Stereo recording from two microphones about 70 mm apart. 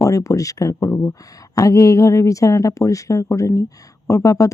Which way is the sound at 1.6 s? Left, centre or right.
Left.